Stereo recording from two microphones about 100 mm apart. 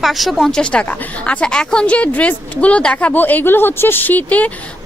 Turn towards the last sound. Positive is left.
turn(degrees=15)  # may be behind; listen again after turning